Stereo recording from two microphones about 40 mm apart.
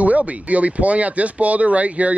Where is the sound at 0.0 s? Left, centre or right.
Right.